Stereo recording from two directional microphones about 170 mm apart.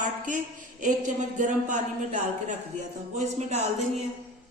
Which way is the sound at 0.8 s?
45° right (ahead or behind).